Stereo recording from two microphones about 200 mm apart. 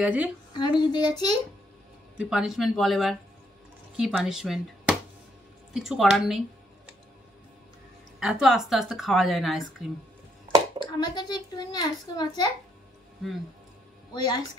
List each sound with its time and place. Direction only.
0.0 s a woman's voice: 5° right (ahead or behind)
0.5 s a child's voice: 20° left (ahead or behind)
2.1 s a woman's voice: 5° right (ahead or behind)
8.2 s a woman's voice: centre (ahead or behind)
10.9 s a child's voice: 20° left (ahead or behind)
14.1 s a child's voice: 20° left (ahead or behind)